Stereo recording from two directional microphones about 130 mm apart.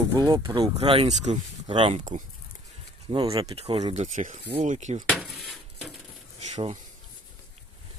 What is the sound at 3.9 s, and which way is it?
Speech, 75° right (ahead or behind).